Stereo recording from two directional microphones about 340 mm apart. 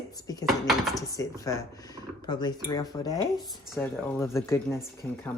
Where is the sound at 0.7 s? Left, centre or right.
Centre.